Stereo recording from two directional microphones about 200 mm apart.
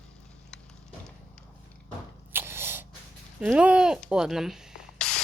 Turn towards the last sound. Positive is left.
turn(degrees=5)  # may be behind; listen again after turning